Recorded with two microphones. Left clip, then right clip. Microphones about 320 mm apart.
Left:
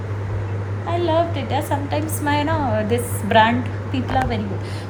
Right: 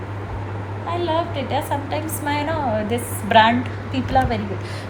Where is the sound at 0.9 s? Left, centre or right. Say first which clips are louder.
Left 3 dB; centre.